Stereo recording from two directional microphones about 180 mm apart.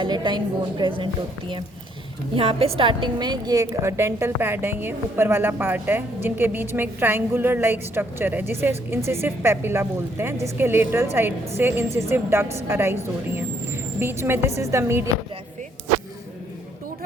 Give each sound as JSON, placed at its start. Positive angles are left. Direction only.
{"t": 0.0, "sound": "a woman's voice", "side_deg": -25}